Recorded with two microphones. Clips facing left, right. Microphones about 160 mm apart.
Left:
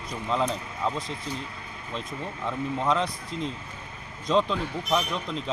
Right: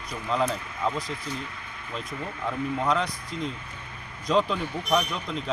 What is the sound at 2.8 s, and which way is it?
Speech, centre (ahead or behind).